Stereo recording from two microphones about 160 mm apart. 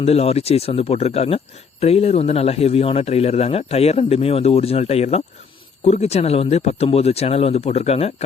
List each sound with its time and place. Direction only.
0.0 s speech: 40° left (ahead or behind)